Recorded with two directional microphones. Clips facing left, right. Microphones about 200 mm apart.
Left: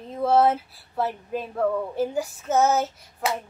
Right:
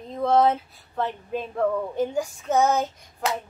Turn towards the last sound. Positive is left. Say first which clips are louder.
# even
turn(degrees=5)  # may be behind; listen again after turning